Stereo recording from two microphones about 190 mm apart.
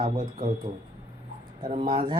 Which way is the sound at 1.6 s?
30° right (ahead or behind).